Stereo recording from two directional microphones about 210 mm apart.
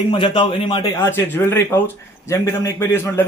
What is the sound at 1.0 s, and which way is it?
A man's voice, 10° left (ahead or behind).